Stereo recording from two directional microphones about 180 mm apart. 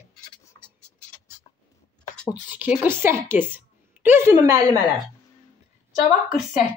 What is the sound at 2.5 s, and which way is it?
A woman's voice, 10° right (ahead or behind).